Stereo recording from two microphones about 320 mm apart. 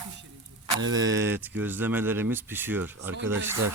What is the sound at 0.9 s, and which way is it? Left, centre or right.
Speech, centre.